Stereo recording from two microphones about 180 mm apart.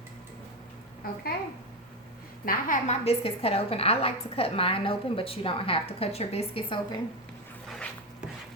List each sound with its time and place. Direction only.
1.0 s a woman's voice: 55° left (ahead or behind)
2.4 s a woman's voice: 50° left (ahead or behind); by 7.0 s 30° left (ahead or behind)